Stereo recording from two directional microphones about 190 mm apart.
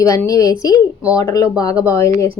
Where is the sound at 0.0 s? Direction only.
15° left (ahead or behind).